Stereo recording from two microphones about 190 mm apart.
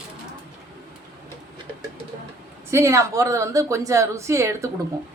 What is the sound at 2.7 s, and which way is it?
A woman's voice, 15° right (ahead or behind).